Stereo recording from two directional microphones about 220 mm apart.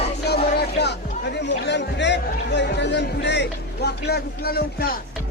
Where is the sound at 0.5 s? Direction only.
50° left (ahead or behind).